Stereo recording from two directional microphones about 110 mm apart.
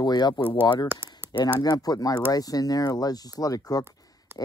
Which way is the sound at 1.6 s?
35° left (ahead or behind).